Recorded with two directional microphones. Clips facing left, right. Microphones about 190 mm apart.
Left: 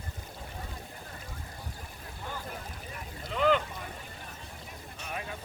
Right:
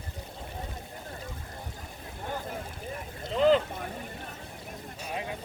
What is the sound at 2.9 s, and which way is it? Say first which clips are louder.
Boat: right 5 dB; 30° right (ahead or behind).